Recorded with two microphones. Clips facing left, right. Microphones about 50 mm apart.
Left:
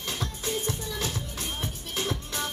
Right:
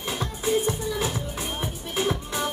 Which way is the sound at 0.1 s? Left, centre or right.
Centre.